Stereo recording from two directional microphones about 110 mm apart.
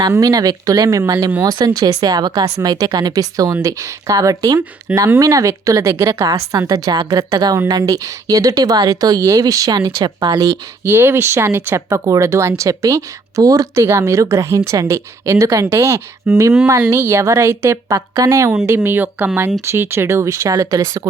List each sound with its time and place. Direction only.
0.0 s speech: 30° right (ahead or behind)
4.9 s speech: 15° right (ahead or behind)
5.2 s speech: 30° right (ahead or behind)
10.3 s speech: 20° right (ahead or behind)